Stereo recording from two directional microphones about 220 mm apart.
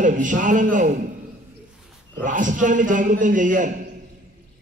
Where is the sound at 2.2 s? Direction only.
35° right (ahead or behind).